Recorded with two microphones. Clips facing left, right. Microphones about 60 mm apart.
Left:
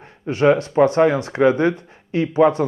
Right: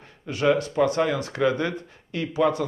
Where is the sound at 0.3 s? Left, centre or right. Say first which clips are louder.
Left 6 dB; left.